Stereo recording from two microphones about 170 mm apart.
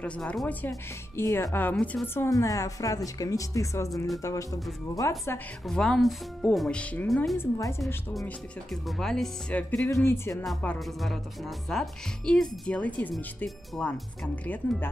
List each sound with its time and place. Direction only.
0.0 s speech: 5° left (ahead or behind)
2.2 s speech: 20° left (ahead or behind)
5.7 s speech: 5° left (ahead or behind)
7.3 s speech: 20° left (ahead or behind)
7.8 s speech: centre (ahead or behind)
10.4 s speech: 5° left (ahead or behind)